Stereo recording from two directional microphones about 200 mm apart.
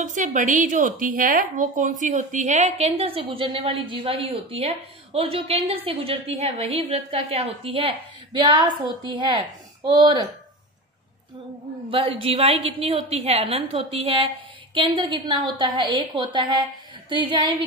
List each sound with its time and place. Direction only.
0.0 s speech: 40° right (ahead or behind); by 10.2 s 25° right (ahead or behind)
11.9 s speech: 25° right (ahead or behind)